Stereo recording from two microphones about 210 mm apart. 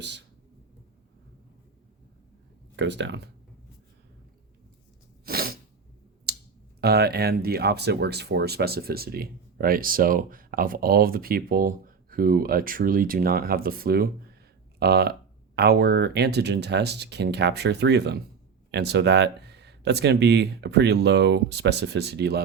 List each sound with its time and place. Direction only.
0.0 s speech: 55° right (ahead or behind)
2.7 s speech: 55° right (ahead or behind)
5.2 s sneeze: 45° right (ahead or behind)
6.3 s a sound: 50° right (ahead or behind)
6.8 s speech: 50° right (ahead or behind)